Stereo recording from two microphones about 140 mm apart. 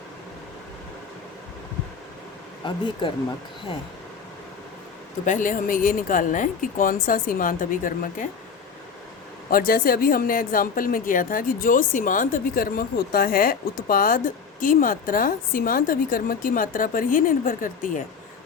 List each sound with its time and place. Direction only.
2.6 s speech: 35° left (ahead or behind)
5.2 s speech: 65° left (ahead or behind)
9.5 s a woman's voice: 90° left
14.6 s a woman's voice: 75° left (ahead or behind)